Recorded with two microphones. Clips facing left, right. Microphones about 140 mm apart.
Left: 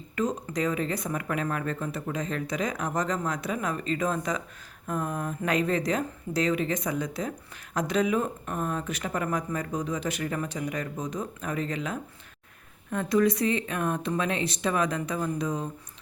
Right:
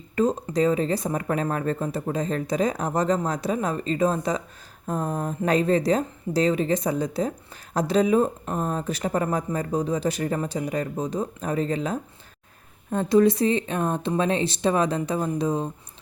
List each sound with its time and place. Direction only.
0.4 s a woman's voice: 30° right (ahead or behind)